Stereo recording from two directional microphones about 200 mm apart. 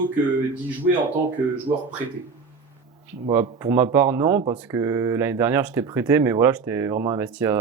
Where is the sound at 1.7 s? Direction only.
25° right (ahead or behind).